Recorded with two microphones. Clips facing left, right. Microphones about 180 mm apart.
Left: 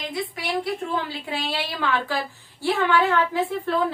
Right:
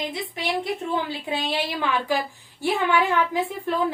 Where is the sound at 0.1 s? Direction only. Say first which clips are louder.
Even; 20° right (ahead or behind).